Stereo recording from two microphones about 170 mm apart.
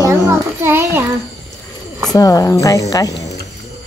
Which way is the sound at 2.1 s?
20° left (ahead or behind).